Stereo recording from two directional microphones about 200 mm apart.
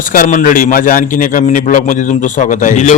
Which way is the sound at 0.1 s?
40° left (ahead or behind).